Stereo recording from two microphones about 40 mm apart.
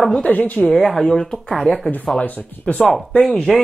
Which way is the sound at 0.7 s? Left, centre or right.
Centre.